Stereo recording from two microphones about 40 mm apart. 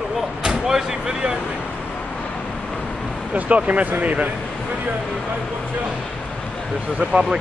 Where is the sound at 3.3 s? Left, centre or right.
Right.